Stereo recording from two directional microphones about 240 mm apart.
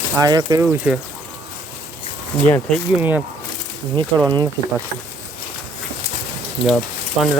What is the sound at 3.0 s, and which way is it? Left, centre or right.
Speech, centre.